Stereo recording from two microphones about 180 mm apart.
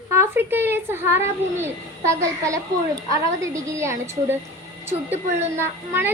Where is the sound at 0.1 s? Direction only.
15° right (ahead or behind).